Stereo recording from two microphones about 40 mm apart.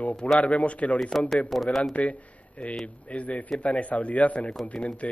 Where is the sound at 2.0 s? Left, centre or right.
Left.